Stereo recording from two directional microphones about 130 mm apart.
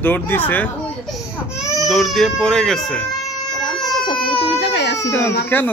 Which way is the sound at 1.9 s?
Centre (ahead or behind).